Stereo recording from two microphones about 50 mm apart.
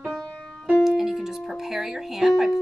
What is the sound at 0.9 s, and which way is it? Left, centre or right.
Speech, centre.